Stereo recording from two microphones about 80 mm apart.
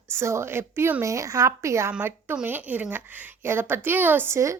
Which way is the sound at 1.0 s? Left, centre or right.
Right.